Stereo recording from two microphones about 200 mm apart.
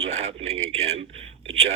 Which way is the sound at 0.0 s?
35° right (ahead or behind).